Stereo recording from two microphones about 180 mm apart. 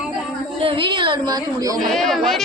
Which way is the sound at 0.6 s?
30° right (ahead or behind).